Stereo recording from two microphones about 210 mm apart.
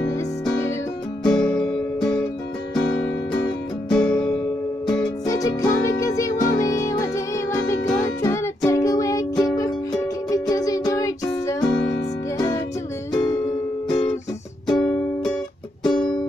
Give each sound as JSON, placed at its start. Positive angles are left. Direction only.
{"t": 0.0, "sound": "music", "side_deg": 10}
{"t": 3.9, "sound": "music", "side_deg": 5}
{"t": 5.2, "sound": "music", "side_deg": 15}
{"t": 14.7, "sound": "music", "side_deg": 5}